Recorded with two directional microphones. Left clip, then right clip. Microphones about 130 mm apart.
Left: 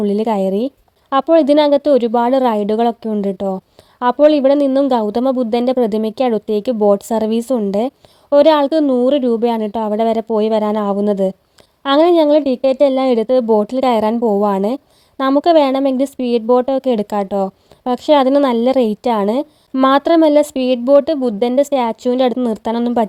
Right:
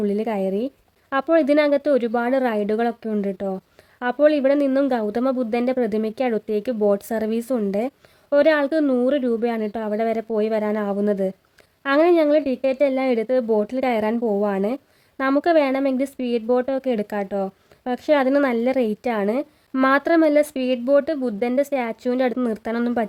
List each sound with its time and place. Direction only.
0.0 s a woman's voice: 40° left (ahead or behind)